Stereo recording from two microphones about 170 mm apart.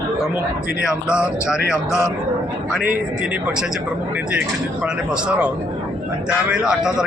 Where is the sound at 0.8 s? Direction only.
5° right (ahead or behind).